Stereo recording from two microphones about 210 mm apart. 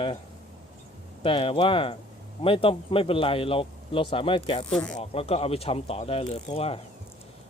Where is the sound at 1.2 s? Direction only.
25° left (ahead or behind).